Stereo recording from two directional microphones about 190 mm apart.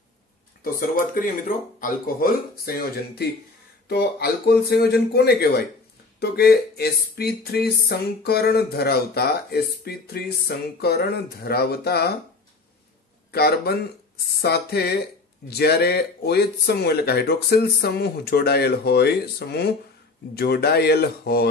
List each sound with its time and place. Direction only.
0.7 s speech: 45° left (ahead or behind)
13.3 s speech: 55° left (ahead or behind)